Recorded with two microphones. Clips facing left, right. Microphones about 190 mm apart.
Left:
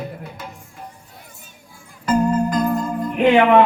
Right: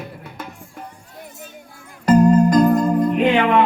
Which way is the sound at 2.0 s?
35° right (ahead or behind).